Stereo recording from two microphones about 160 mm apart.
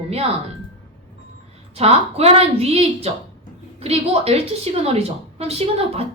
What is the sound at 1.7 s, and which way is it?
A woman's voice, 40° right (ahead or behind).